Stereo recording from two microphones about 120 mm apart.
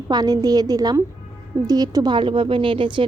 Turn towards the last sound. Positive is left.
turn(degrees=-45)  # may be behind; listen again after turning